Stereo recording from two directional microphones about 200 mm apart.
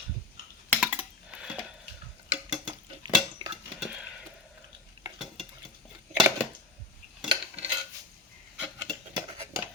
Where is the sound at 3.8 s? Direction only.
5° right (ahead or behind).